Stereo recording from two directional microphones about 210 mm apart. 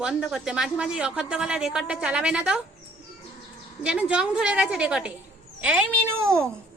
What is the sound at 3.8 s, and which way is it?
A woman's voice, 5° right (ahead or behind).